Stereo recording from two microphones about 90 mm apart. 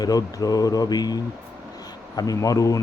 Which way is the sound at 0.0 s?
45° left (ahead or behind).